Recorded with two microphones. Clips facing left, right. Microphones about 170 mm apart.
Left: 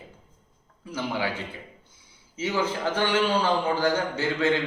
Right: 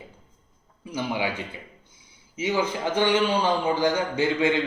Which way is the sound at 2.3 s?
15° right (ahead or behind).